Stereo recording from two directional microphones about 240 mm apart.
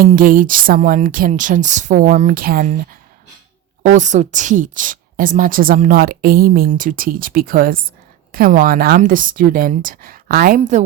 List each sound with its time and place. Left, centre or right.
0.0 s a woman's voice: right
3.9 s a woman's voice: right